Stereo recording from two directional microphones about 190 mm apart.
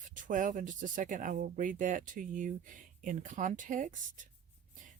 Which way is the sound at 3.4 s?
45° right (ahead or behind).